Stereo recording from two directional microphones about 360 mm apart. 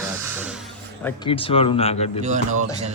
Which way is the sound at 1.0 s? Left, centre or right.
Centre.